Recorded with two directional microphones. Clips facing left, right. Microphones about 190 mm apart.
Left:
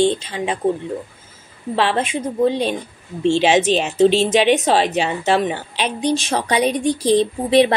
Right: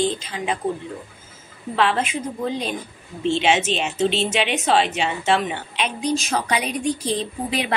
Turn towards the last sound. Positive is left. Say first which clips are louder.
# left 10 dB
turn(degrees=35)  # may be behind; listen again after turning